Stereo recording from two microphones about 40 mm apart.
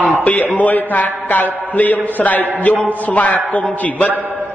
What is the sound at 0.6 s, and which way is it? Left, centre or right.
A man's voice, left.